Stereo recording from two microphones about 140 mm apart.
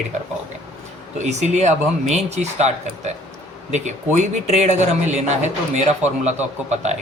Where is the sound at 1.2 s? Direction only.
55° right (ahead or behind).